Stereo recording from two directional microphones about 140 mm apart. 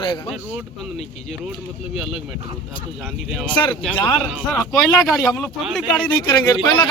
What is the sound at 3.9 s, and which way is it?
A man's voice, 10° left (ahead or behind).